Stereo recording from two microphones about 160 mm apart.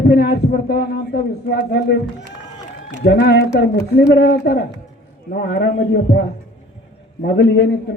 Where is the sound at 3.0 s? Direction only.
85° left.